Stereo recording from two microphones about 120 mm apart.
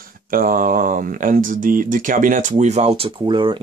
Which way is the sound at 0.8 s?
90° right.